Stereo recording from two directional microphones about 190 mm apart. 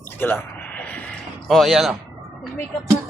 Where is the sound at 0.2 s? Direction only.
10° left (ahead or behind).